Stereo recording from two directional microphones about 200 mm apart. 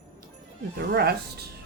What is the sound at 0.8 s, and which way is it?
Speech, 50° right (ahead or behind).